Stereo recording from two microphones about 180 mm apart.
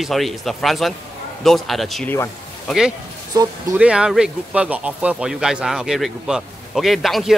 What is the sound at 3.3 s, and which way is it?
Speech, 20° right (ahead or behind).